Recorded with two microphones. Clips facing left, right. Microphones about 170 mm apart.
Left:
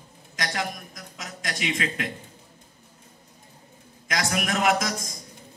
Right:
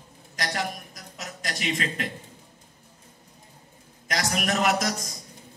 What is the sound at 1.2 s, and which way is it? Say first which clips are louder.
Speech: even; 40° right (ahead or behind).